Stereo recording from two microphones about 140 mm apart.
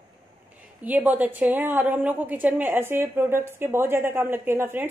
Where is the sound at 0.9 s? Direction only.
10° right (ahead or behind).